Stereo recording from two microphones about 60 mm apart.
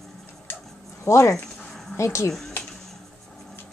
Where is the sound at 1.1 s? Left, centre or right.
Left.